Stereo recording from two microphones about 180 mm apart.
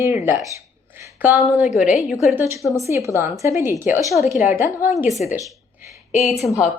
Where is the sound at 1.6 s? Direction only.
Centre (ahead or behind).